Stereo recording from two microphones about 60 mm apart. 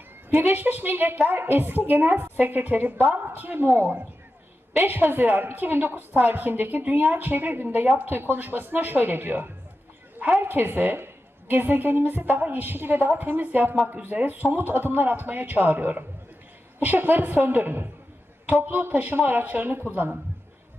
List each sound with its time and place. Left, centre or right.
0.3 s a woman's voice: right